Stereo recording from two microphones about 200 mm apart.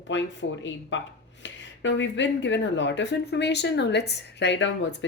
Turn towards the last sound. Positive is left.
turn(degrees=60)  # may be behind; listen again after turning